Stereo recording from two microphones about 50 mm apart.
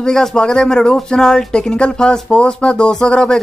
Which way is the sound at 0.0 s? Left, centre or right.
Centre.